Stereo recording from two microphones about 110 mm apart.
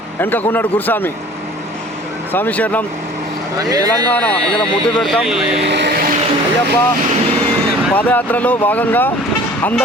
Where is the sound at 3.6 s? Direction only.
35° right (ahead or behind).